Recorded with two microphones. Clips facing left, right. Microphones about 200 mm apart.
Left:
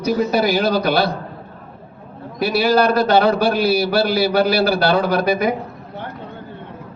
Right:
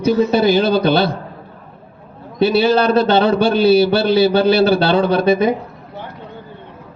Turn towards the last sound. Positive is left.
turn(degrees=-25)  # may be behind; listen again after turning